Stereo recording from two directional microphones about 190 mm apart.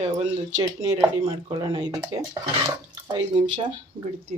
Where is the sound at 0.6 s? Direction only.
20° right (ahead or behind).